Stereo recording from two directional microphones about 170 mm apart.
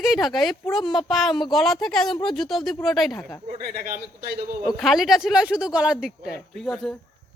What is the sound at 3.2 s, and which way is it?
Speech, 10° left (ahead or behind).